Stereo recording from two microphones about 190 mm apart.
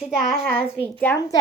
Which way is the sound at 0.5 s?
10° left (ahead or behind).